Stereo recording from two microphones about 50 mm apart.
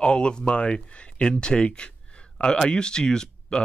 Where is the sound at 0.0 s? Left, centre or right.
Centre.